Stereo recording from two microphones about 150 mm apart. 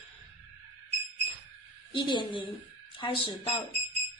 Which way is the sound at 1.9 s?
35° left (ahead or behind).